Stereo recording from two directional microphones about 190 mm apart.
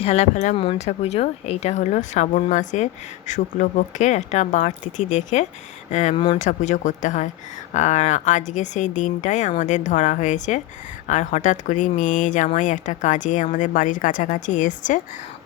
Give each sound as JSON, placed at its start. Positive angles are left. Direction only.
{"t": 0.0, "sound": "speech", "side_deg": 35}
{"t": 6.1, "sound": "speech", "side_deg": 25}
{"t": 6.4, "sound": "speech", "side_deg": 40}